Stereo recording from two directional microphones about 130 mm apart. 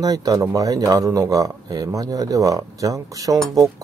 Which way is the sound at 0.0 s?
30° right (ahead or behind).